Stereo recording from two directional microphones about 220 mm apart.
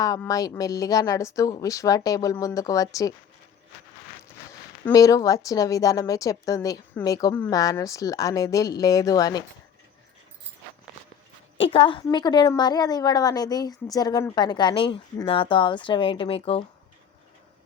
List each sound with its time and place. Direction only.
0.0 s a woman's voice: 15° left (ahead or behind)
4.9 s a woman's voice: 15° left (ahead or behind)
11.6 s a woman's voice: 25° left (ahead or behind)